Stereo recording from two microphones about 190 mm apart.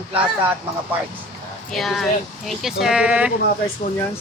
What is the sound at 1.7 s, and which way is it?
Speech, centre (ahead or behind).